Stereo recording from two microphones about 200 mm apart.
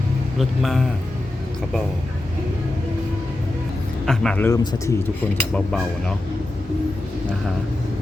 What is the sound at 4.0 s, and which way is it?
Speech, 5° left (ahead or behind).